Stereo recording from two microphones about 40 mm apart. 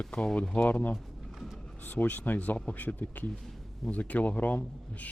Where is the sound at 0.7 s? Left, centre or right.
Left.